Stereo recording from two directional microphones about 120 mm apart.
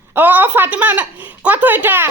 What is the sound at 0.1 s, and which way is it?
Speech, 15° right (ahead or behind).